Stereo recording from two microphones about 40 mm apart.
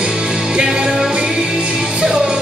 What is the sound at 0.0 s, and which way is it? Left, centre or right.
Music, right.